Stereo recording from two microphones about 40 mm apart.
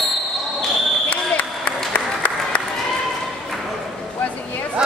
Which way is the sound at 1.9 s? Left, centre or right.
Left.